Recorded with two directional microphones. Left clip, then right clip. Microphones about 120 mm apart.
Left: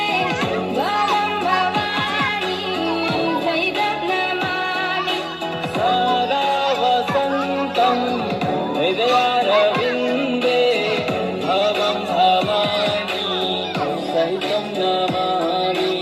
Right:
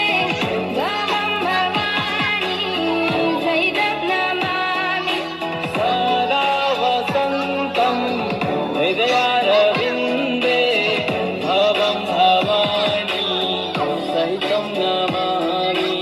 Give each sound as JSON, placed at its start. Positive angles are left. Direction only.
{"t": 5.8, "sound": "music", "side_deg": 30}
{"t": 8.8, "sound": "music", "side_deg": 35}